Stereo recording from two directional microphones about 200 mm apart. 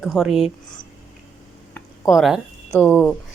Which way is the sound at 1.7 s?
Centre (ahead or behind).